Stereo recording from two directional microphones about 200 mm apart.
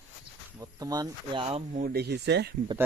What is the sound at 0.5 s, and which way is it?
Speech, 15° right (ahead or behind).